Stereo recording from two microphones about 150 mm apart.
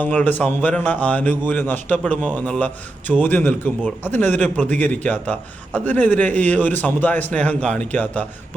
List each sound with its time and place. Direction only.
0.0 s a man's voice: 10° left (ahead or behind)